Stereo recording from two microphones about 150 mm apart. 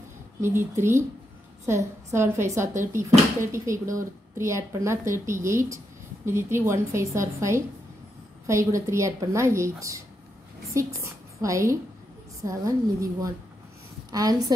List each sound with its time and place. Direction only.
0.4 s a woman's voice: 15° right (ahead or behind)